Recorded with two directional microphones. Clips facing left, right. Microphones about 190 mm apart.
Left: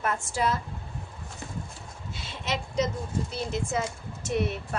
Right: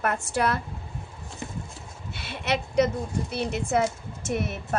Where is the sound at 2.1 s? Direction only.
65° right (ahead or behind).